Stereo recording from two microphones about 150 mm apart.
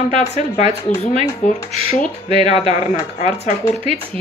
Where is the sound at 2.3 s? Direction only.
45° left (ahead or behind).